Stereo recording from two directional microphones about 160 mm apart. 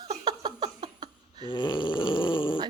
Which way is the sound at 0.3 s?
25° right (ahead or behind).